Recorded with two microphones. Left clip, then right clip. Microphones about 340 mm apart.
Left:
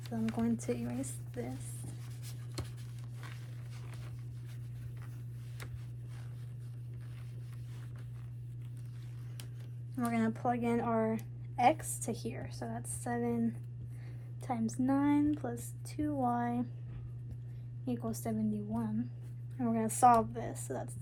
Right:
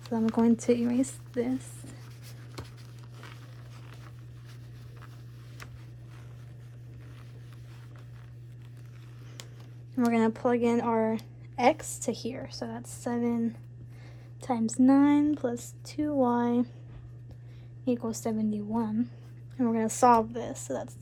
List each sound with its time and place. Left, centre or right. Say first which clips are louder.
0.4 s speech: right 11 dB; right
10.0 s speech: right 8 dB; right
17.8 s speech: right 8 dB; right